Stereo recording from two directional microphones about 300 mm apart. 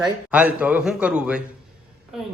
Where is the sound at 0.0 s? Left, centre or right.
Centre.